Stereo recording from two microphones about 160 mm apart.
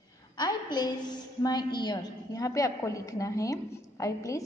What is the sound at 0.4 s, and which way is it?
A woman's voice, 25° left (ahead or behind).